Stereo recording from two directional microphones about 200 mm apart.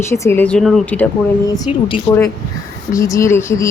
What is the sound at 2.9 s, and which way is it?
Speech, 15° left (ahead or behind).